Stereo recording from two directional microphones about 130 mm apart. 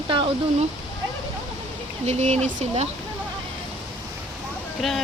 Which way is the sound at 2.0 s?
60° right (ahead or behind).